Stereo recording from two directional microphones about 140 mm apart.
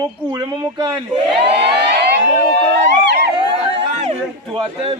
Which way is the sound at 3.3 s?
40° right (ahead or behind).